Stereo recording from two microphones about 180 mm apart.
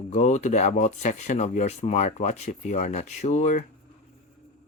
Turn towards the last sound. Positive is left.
turn(degrees=40)  # may be behind; listen again after turning